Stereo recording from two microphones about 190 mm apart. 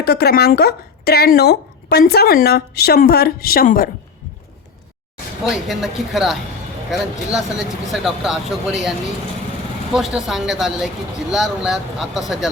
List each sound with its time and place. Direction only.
0.0 s speech: 55° left (ahead or behind)
5.5 s speech: centre (ahead or behind)
7.3 s speech: 5° right (ahead or behind)